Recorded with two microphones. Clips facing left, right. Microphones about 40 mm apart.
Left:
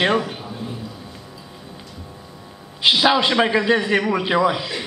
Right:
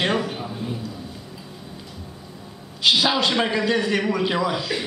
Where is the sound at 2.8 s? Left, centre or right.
Centre.